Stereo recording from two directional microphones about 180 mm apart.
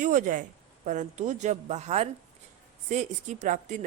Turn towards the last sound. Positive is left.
turn(degrees=-45)  # may be behind; listen again after turning